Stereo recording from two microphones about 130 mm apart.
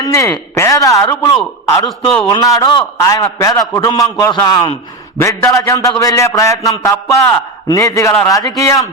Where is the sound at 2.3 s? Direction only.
25° left (ahead or behind).